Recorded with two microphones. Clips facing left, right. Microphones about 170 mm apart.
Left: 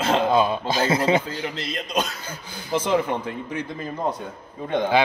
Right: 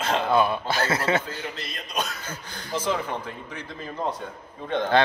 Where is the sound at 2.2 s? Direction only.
10° left (ahead or behind).